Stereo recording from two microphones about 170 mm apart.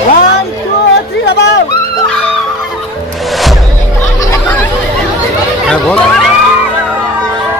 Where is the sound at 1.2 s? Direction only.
80° left.